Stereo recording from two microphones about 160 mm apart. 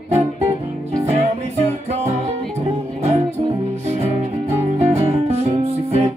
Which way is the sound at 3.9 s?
40° right (ahead or behind).